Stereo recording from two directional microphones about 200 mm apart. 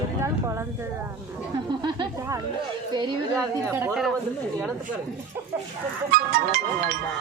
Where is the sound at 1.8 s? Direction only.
20° right (ahead or behind).